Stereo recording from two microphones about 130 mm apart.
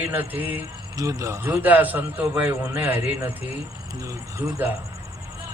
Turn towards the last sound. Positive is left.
turn(degrees=-20)  # may be behind; listen again after turning